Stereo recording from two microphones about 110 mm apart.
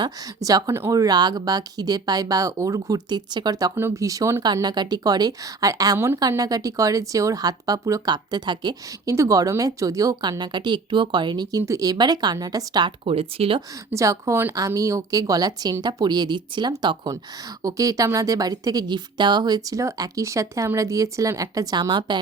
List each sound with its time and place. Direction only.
0.0 s speech: 35° right (ahead or behind)
3.8 s speech: 25° right (ahead or behind)
4.5 s speech: 40° right (ahead or behind)
9.1 s speech: 30° right (ahead or behind)
11.6 s speech: 30° right (ahead or behind)
13.1 s speech: 60° right (ahead or behind)
13.9 s speech: 30° right (ahead or behind)
17.6 s speech: 30° right (ahead or behind)